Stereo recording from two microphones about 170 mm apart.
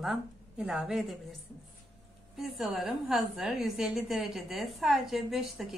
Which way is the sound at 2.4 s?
Centre (ahead or behind).